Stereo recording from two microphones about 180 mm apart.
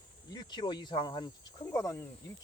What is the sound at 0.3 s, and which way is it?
Speech, 25° left (ahead or behind).